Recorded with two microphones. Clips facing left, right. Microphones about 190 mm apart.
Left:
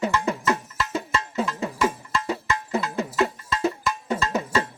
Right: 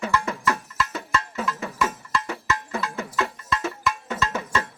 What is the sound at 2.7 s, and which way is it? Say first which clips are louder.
Music: left 4 dB; 25° left (ahead or behind).